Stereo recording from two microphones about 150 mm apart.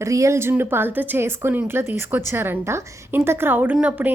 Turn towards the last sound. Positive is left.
turn(degrees=-10)  # may be behind; listen again after turning